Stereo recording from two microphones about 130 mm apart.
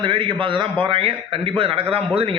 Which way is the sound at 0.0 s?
40° right (ahead or behind).